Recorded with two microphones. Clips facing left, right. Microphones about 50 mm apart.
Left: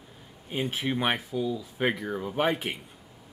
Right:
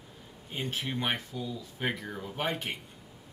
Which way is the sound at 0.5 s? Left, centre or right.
Centre.